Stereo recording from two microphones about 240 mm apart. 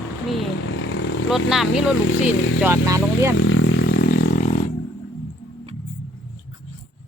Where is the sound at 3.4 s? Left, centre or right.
Left.